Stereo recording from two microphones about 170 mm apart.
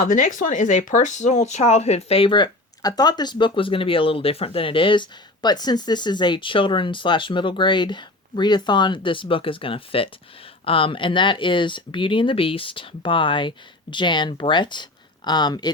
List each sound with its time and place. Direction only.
0.0 s speech: 50° left (ahead or behind); by 15.7 s 25° left (ahead or behind)